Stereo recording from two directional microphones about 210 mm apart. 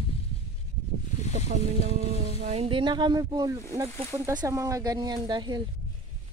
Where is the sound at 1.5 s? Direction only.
35° right (ahead or behind).